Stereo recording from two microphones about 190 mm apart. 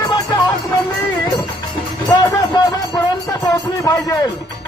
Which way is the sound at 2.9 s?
15° left (ahead or behind).